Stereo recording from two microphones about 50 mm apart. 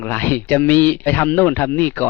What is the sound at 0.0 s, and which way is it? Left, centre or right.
Speech, left.